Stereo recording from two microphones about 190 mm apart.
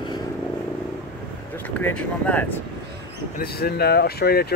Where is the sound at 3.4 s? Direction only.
55° left (ahead or behind).